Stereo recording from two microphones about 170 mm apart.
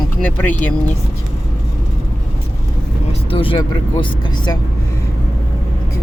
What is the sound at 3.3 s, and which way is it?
Speech, 30° left (ahead or behind).